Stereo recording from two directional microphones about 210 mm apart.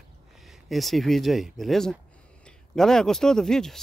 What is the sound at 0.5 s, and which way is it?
Speech, centre (ahead or behind).